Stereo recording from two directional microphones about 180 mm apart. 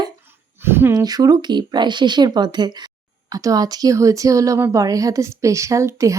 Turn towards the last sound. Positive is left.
turn(degrees=-15)  # may be behind; listen again after turning